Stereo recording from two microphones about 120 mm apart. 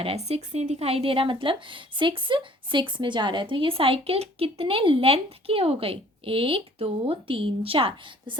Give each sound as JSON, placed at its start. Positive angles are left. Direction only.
{"t": 0.0, "sound": "speech", "side_deg": -55}